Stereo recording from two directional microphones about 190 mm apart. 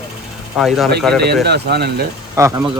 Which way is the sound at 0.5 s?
Centre (ahead or behind).